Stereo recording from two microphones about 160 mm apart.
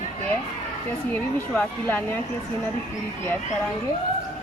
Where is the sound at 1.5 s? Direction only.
10° left (ahead or behind).